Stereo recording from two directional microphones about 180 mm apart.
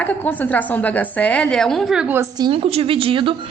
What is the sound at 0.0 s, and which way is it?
Speech, 10° left (ahead or behind).